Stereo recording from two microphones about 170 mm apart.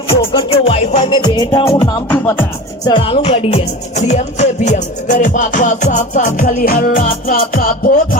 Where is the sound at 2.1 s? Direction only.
10° left (ahead or behind).